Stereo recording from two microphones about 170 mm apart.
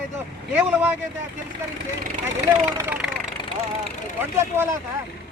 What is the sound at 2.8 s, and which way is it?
Speech, 10° right (ahead or behind).